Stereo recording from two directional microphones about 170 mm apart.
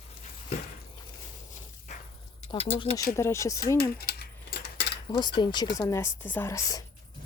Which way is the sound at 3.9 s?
65° left (ahead or behind).